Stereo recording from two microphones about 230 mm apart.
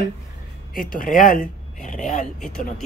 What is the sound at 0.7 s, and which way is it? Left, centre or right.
Speech, left.